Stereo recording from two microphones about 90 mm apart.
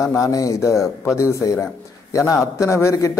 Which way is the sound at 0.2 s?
40° left (ahead or behind).